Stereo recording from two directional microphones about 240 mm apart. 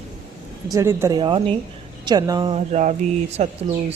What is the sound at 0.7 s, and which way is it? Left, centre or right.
A woman's voice, centre.